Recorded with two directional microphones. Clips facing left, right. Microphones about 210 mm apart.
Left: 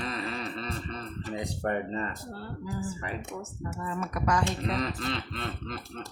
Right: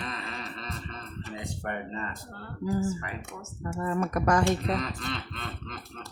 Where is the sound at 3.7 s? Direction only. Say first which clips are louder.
Right 6 dB; 50° right (ahead or behind).